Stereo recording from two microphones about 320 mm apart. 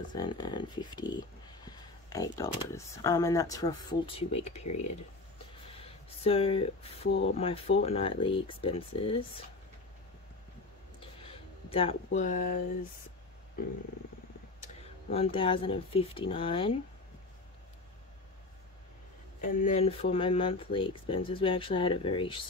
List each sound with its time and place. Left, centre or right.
0.1 s speech: centre
11.0 s a sound: centre
15.0 s speech: centre
19.6 s speech: centre